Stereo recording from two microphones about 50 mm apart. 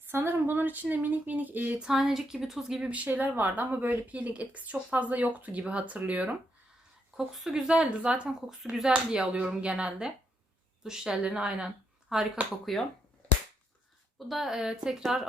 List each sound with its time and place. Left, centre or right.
0.1 s speech: right
1.8 s a woman's voice: centre
2.9 s speech: right
7.3 s a woman's voice: centre
7.8 s speech: right
8.4 s a woman's voice: centre
10.8 s a woman's voice: centre
12.0 s speech: centre
14.3 s a woman's voice: centre